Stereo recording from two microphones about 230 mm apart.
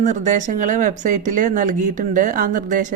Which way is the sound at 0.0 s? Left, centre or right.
Right.